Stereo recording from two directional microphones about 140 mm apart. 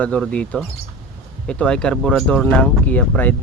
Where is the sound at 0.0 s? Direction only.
10° left (ahead or behind).